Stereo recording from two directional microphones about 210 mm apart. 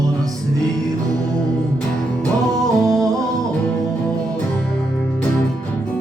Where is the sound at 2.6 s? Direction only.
Centre (ahead or behind).